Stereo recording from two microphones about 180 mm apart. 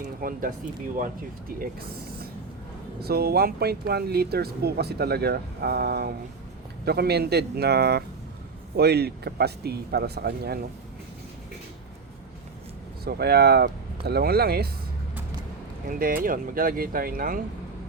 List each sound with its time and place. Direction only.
0.2 s speech: 50° right (ahead or behind)
3.0 s speech: 60° right (ahead or behind)
13.1 s speech: 60° right (ahead or behind)
15.9 s speech: 50° right (ahead or behind)